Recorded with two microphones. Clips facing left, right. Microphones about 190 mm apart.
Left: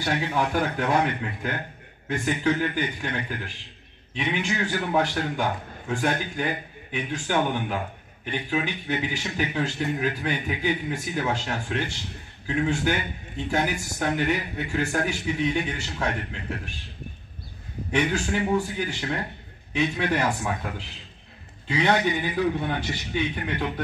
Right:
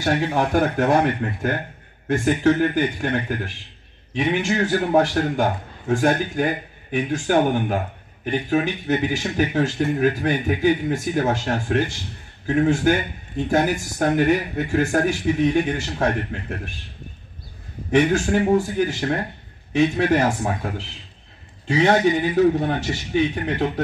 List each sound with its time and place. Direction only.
0.0 s speech: 50° right (ahead or behind)
17.9 s speech: 50° right (ahead or behind)
21.6 s speech: 45° right (ahead or behind)